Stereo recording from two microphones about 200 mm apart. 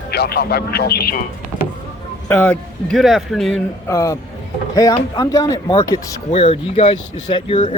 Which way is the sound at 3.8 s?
15° left (ahead or behind).